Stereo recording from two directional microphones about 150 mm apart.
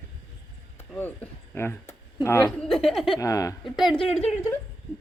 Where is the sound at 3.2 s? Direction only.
20° left (ahead or behind).